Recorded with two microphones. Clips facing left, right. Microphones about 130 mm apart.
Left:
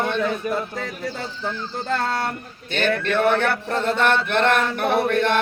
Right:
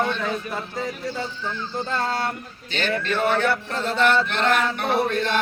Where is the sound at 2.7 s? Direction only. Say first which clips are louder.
Left 3 dB; 55° left (ahead or behind).